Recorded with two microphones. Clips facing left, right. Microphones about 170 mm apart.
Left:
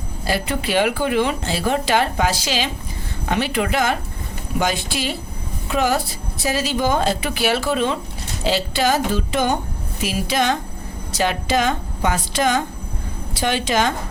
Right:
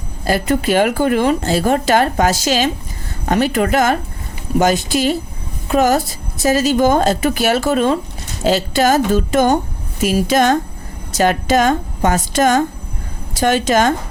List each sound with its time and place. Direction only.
0.3 s speech: 45° right (ahead or behind)